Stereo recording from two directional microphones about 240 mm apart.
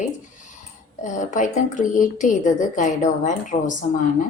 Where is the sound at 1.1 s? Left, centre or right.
Left.